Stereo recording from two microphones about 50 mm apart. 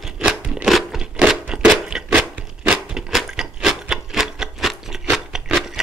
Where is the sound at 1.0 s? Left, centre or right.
Right.